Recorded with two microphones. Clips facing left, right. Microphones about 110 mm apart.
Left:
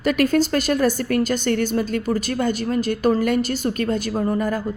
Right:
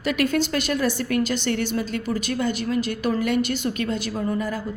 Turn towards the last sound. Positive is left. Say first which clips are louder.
# left 4 dB
turn(degrees=45)  # may be behind; listen again after turning